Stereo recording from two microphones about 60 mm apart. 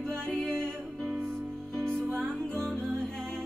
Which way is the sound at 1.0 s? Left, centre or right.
Right.